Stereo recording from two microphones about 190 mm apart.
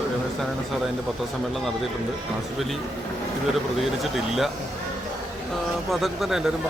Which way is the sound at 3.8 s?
Centre (ahead or behind).